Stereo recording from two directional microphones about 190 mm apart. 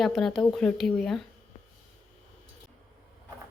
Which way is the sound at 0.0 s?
Centre (ahead or behind).